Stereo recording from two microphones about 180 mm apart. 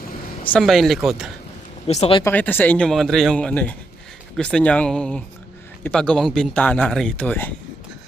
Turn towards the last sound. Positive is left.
turn(degrees=10)  # may be behind; listen again after turning